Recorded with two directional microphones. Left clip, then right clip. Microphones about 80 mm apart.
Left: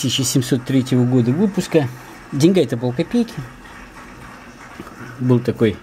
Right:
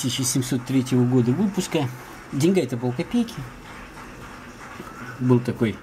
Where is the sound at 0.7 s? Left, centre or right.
Left.